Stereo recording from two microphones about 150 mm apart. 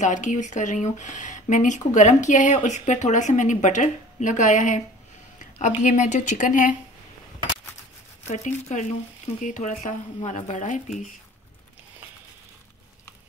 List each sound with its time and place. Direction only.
0.0 s a woman's voice: 55° left (ahead or behind)
5.8 s speech: 55° left (ahead or behind)
8.3 s a woman's voice: 50° left (ahead or behind)